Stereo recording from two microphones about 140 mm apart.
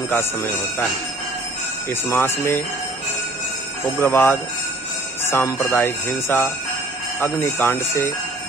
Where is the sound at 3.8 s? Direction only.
15° left (ahead or behind).